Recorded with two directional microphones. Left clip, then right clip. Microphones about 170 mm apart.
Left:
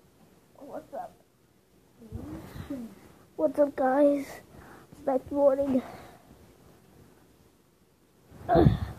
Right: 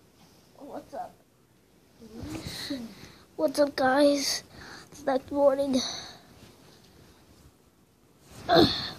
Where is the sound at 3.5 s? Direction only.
Centre (ahead or behind).